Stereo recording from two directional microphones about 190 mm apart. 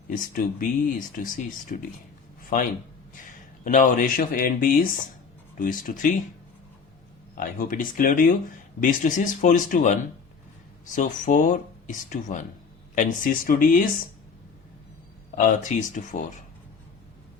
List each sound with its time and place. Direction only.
0.1 s speech: 45° left (ahead or behind)
2.4 s a sound: 45° left (ahead or behind)
3.2 s speech: 45° left (ahead or behind)
7.3 s speech: 45° left (ahead or behind)
10.9 s speech: 40° left (ahead or behind)
15.4 s speech: 45° left (ahead or behind)